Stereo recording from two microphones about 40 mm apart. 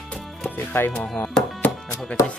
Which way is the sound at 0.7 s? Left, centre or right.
Left.